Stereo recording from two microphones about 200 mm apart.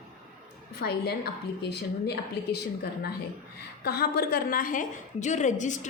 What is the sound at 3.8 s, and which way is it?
A woman's voice, 50° left (ahead or behind).